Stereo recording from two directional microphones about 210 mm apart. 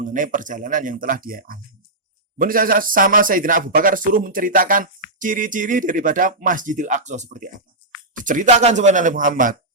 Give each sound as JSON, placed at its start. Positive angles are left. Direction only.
{"t": 0.0, "sound": "speech", "side_deg": -40}